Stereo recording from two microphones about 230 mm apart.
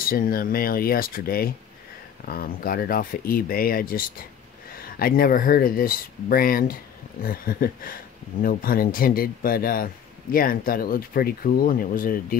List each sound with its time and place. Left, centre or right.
0.0 s speech: left